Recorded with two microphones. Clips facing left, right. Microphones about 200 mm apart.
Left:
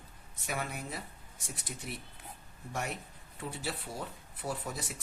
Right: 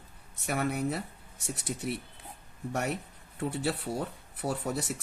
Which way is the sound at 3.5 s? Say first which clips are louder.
Right 7 dB; 65° right (ahead or behind).